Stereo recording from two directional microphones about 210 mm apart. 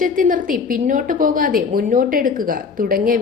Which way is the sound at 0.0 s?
40° right (ahead or behind).